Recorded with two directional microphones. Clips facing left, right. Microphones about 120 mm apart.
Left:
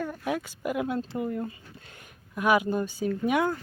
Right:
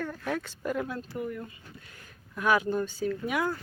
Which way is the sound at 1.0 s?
25° left (ahead or behind).